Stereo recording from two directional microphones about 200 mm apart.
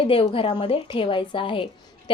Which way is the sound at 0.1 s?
25° left (ahead or behind).